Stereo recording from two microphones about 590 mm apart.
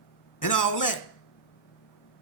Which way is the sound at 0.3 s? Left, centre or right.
Left.